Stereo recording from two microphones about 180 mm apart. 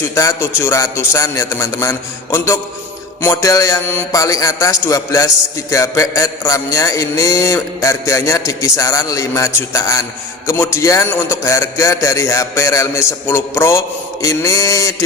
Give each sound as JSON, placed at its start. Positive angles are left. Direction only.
{"t": 0.1, "sound": "a man's voice", "side_deg": 15}